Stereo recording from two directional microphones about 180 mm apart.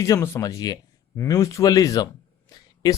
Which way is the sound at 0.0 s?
15° left (ahead or behind).